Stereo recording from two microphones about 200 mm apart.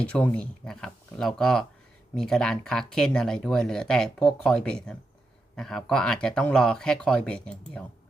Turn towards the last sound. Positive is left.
turn(degrees=5)  # may be behind; listen again after turning